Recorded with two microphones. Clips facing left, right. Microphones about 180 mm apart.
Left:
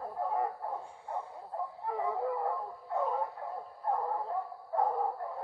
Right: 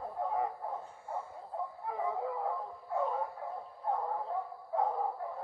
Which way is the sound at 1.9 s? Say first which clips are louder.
Left 3 dB; centre (ahead or behind).